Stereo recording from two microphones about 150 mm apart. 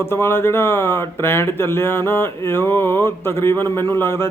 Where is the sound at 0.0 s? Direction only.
15° left (ahead or behind).